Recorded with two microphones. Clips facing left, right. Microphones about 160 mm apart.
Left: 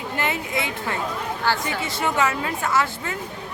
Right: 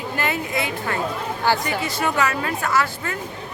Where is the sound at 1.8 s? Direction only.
25° left (ahead or behind).